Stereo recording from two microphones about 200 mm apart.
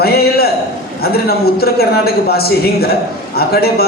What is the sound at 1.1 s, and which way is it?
A man's voice, 50° left (ahead or behind).